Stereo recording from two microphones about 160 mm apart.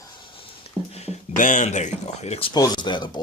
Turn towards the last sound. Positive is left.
turn(degrees=30)  # may be behind; listen again after turning